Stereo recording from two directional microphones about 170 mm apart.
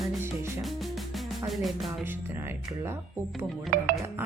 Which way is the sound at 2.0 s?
15° right (ahead or behind).